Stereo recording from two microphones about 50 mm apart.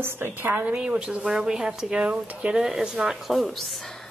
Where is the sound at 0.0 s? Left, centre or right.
Right.